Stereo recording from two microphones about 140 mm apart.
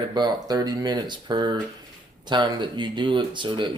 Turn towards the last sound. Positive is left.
turn(degrees=-35)  # may be behind; listen again after turning